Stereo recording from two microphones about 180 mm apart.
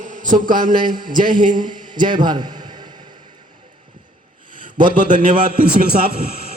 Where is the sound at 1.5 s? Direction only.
25° right (ahead or behind).